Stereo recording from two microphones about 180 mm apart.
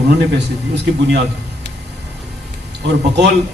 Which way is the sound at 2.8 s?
70° right (ahead or behind).